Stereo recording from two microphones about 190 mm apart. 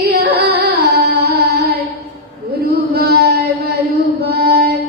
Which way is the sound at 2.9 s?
55° right (ahead or behind).